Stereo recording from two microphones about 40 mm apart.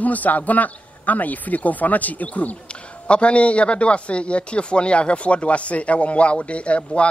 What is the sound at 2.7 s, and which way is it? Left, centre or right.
A man's voice, left.